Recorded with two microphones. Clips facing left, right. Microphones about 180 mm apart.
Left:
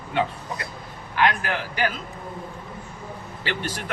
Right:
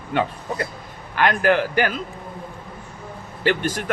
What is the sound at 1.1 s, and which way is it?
Speech, 55° right (ahead or behind).